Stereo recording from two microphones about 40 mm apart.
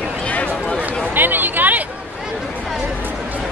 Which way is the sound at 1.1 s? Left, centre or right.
Right.